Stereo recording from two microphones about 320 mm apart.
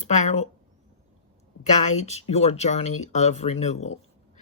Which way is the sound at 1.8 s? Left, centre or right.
Left.